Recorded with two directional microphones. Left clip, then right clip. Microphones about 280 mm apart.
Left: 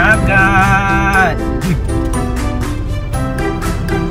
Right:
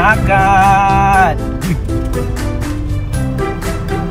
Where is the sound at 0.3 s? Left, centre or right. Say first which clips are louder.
Right 2 dB; centre.